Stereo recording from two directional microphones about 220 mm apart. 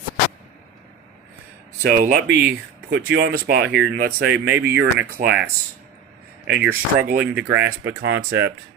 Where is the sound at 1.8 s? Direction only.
40° right (ahead or behind).